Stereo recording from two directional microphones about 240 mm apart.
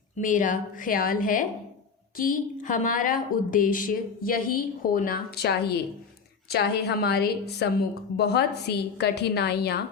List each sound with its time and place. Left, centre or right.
0.2 s a woman's voice: left